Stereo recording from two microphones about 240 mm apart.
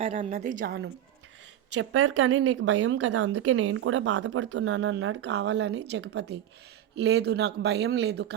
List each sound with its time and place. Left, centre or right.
0.0 s a woman's voice: right
1.7 s speech: right